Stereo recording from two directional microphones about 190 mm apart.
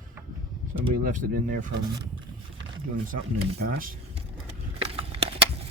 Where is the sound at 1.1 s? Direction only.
45° right (ahead or behind).